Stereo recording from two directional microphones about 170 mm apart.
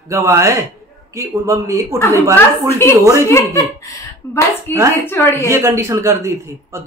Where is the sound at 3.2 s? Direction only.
15° left (ahead or behind).